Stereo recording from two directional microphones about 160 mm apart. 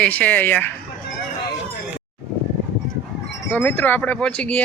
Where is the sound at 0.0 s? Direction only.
10° left (ahead or behind).